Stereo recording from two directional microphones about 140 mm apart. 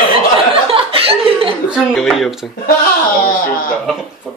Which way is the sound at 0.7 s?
40° right (ahead or behind).